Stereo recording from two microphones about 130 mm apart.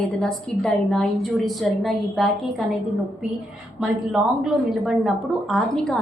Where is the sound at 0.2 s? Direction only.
5° left (ahead or behind).